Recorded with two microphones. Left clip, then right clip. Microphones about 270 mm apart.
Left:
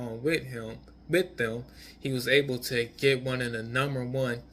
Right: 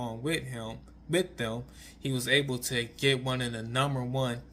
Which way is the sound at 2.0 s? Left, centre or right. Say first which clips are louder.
Left 2 dB; centre.